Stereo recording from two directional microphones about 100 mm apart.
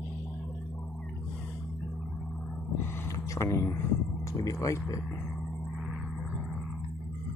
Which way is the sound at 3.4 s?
25° left (ahead or behind).